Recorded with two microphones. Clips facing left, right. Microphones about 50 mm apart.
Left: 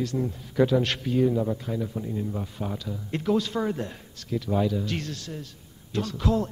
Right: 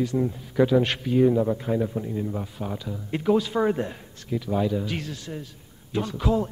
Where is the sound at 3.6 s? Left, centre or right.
Right.